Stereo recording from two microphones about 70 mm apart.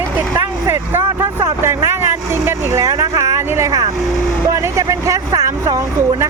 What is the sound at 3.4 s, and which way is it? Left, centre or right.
Speech, right.